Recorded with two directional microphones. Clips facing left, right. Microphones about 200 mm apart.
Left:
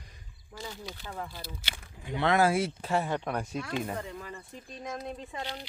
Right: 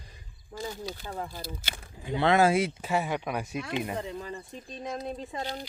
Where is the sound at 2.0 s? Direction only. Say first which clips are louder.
Right 3 dB; 30° right (ahead or behind).